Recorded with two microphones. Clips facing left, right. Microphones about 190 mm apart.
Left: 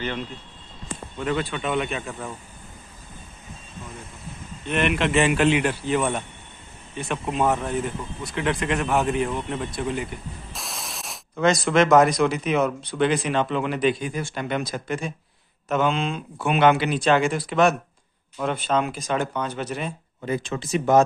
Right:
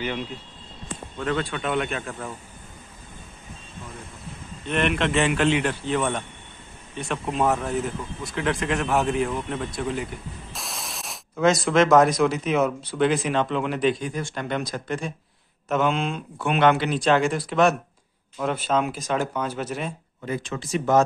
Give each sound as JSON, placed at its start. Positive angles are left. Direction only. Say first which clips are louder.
{"t": 1.1, "sound": "speech", "louder": "even", "side_deg": 5}
{"t": 4.6, "sound": "a man's voice", "louder": "left 1 dB", "side_deg": 5}
{"t": 20.2, "sound": "speech", "louder": "left 2 dB", "side_deg": 20}